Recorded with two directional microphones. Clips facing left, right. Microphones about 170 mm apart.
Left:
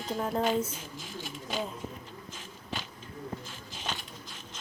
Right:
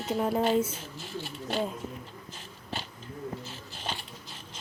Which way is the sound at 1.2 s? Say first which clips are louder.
Right 2 dB; 45° left (ahead or behind).